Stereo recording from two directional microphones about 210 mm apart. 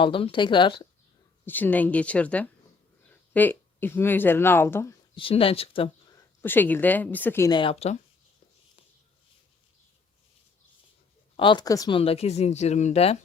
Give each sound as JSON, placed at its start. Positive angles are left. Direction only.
{"t": 0.0, "sound": "speech", "side_deg": 25}
{"t": 1.5, "sound": "speech", "side_deg": 10}
{"t": 5.1, "sound": "speech", "side_deg": 25}
{"t": 6.1, "sound": "speech", "side_deg": 10}
{"t": 11.3, "sound": "speech", "side_deg": 20}